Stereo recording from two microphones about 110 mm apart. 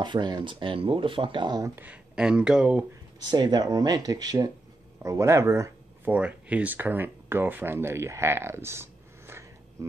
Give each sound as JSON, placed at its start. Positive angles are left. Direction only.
{"t": 0.0, "sound": "speech", "side_deg": -45}
{"t": 1.8, "sound": "speech", "side_deg": -10}
{"t": 3.2, "sound": "speech", "side_deg": -40}
{"t": 6.1, "sound": "speech", "side_deg": -10}